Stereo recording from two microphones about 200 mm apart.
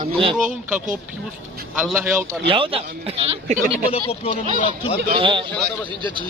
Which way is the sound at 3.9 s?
30° left (ahead or behind).